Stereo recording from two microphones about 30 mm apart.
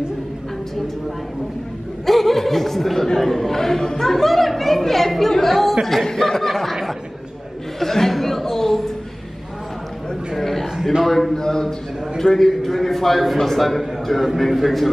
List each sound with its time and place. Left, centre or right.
2.0 s speech: centre
6.5 s speech: centre
7.8 s chatter: centre
10.3 s a sound: centre
10.6 s a sound: centre
11.1 s speech: centre
11.3 s a man's voice: centre
12.4 s a man's voice: centre